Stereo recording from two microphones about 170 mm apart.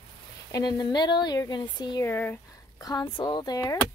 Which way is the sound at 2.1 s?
10° left (ahead or behind).